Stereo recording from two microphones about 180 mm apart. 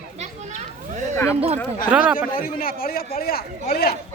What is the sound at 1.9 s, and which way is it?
Speech, 5° right (ahead or behind).